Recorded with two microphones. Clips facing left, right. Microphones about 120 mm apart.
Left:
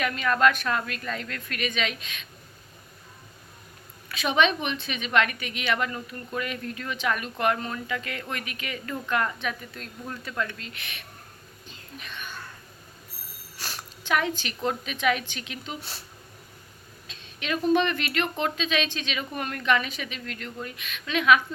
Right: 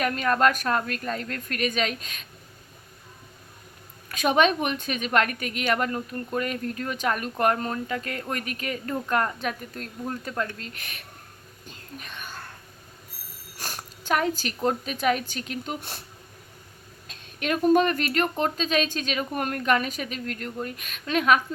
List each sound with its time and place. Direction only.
0.0 s speech: 45° right (ahead or behind)
4.1 s speech: 45° right (ahead or behind)
11.6 s whispering: 45° right (ahead or behind)
13.6 s speech: 45° right (ahead or behind)
17.1 s speech: 50° right (ahead or behind)